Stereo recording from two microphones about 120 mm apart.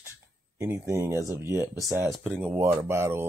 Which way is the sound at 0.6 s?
25° right (ahead or behind).